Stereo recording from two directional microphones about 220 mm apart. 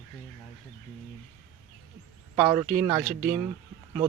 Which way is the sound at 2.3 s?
15° right (ahead or behind).